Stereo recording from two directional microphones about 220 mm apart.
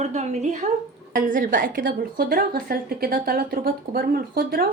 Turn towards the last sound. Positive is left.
turn(degrees=-40)  # may be behind; listen again after turning